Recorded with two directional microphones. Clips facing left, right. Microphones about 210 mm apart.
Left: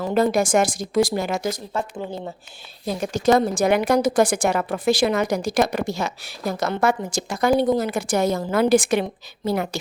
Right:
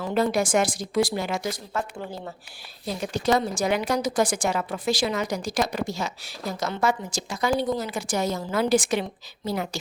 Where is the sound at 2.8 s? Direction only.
45° left (ahead or behind).